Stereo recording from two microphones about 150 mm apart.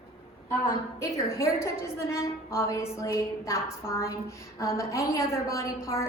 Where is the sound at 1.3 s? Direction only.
20° left (ahead or behind).